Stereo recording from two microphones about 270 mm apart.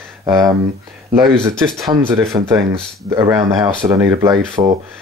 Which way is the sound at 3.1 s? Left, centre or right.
Centre.